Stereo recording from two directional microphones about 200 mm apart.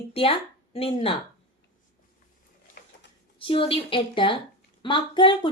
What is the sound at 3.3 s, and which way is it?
Speech, 25° left (ahead or behind).